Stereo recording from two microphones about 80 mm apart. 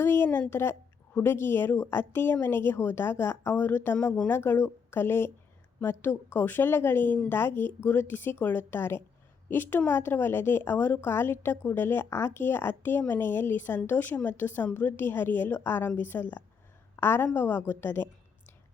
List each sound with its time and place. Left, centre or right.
0.0 s a woman's voice: left